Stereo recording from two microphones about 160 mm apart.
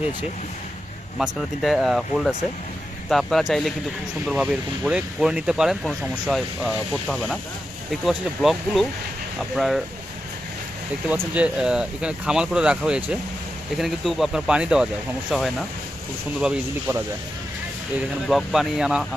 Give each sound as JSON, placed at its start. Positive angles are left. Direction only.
{"t": 1.2, "sound": "speech", "side_deg": 0}
{"t": 11.1, "sound": "speech", "side_deg": -10}
{"t": 18.3, "sound": "speech", "side_deg": 0}